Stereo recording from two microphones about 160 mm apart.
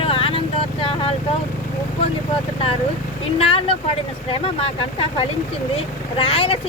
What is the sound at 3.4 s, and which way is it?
Speech, 35° left (ahead or behind).